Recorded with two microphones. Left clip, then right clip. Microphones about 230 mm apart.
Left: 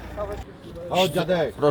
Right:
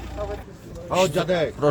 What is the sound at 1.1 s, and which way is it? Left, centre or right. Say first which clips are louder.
Speech: right 1 dB; centre.